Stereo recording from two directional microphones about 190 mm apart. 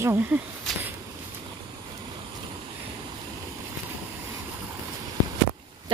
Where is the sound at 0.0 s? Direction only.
10° right (ahead or behind).